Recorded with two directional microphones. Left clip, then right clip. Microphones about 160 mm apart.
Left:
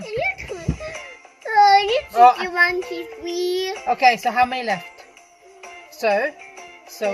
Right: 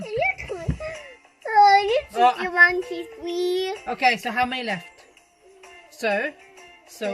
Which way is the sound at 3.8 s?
15° right (ahead or behind).